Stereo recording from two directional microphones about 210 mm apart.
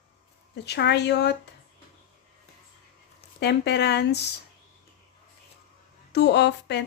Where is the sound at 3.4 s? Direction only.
55° left (ahead or behind).